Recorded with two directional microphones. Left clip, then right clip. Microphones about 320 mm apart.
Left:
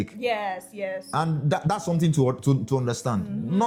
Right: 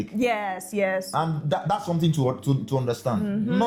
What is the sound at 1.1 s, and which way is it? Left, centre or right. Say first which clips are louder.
Speech: even; left.